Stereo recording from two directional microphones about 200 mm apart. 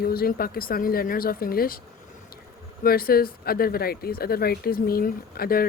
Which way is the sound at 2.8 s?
50° left (ahead or behind).